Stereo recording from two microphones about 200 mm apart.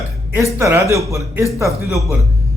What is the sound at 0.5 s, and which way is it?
Speech, 15° right (ahead or behind).